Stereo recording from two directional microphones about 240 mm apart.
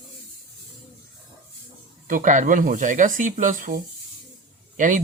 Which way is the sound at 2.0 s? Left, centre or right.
Right.